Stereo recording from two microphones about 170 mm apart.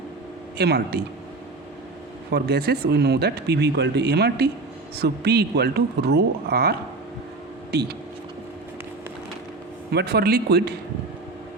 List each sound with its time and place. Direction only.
0.6 s speech: 65° right (ahead or behind)
2.3 s speech: 65° right (ahead or behind)
9.9 s speech: 75° right (ahead or behind)